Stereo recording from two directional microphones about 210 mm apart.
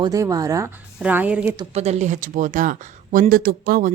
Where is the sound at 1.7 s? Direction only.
30° right (ahead or behind).